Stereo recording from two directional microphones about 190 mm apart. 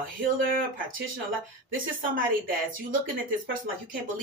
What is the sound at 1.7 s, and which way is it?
A woman's voice, 45° right (ahead or behind).